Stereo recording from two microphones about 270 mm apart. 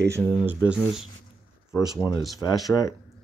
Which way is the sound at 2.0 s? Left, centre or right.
Centre.